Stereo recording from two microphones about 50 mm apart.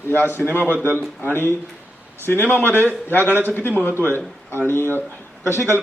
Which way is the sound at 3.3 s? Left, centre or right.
Right.